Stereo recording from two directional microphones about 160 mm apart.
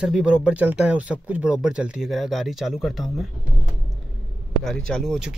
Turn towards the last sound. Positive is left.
turn(degrees=0)  # may be behind; listen again after turning